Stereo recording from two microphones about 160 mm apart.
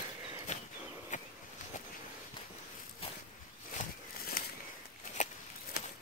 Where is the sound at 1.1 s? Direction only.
50° left (ahead or behind).